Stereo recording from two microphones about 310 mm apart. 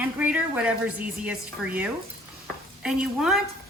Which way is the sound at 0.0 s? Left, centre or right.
Centre.